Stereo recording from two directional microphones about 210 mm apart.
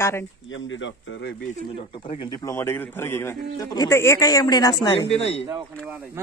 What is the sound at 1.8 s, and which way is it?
A man's voice, 25° left (ahead or behind).